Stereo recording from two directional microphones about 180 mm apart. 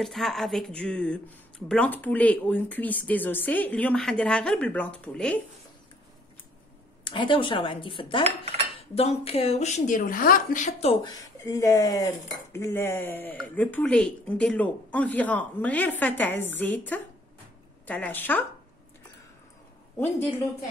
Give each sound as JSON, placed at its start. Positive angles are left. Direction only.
{"t": 0.0, "sound": "speech", "side_deg": 0}
{"t": 7.1, "sound": "a woman's voice", "side_deg": 25}
{"t": 11.1, "sound": "speech", "side_deg": 20}